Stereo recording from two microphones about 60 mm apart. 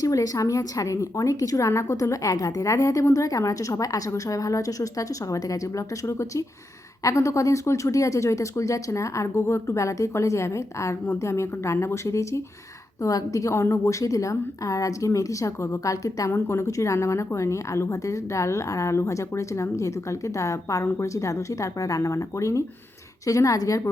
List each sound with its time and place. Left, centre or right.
0.0 s a woman's voice: left
6.1 s speech: left
13.0 s speech: left
14.0 s speech: left
16.3 s a woman's voice: left